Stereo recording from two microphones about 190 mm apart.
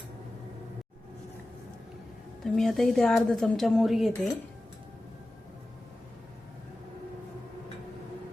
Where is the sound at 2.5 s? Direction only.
Centre (ahead or behind).